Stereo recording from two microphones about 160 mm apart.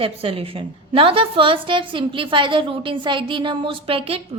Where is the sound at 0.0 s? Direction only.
35° right (ahead or behind).